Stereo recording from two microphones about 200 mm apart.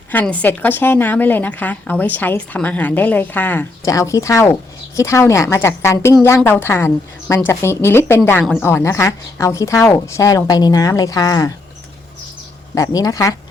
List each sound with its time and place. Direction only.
0.1 s speech: 10° left (ahead or behind)
12.7 s speech: 15° left (ahead or behind)